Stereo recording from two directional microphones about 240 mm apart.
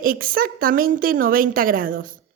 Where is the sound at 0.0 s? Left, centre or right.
Right.